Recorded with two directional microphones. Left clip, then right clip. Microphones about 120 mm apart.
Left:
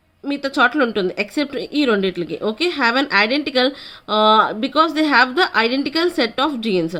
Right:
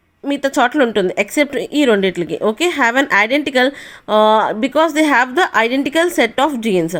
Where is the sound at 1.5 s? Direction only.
30° right (ahead or behind).